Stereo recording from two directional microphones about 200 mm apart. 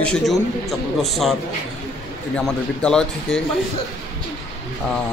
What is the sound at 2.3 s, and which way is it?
A man's voice, 5° left (ahead or behind).